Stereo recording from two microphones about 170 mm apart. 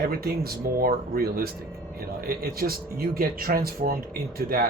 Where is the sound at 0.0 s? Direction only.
65° right (ahead or behind).